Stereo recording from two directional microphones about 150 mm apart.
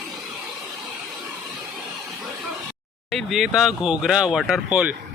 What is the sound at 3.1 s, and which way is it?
Speech, centre (ahead or behind).